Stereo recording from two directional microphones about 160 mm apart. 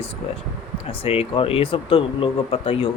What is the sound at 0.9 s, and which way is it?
Speech, 35° left (ahead or behind).